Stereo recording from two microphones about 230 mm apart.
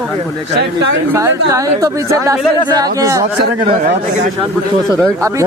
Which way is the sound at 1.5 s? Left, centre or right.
Centre.